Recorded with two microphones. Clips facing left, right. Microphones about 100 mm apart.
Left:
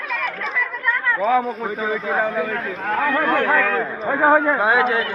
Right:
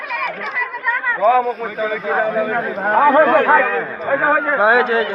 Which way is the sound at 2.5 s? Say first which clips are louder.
Right 7 dB; 80° right.